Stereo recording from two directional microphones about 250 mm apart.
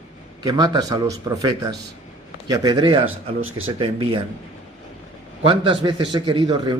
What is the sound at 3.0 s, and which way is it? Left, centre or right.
Speech, right.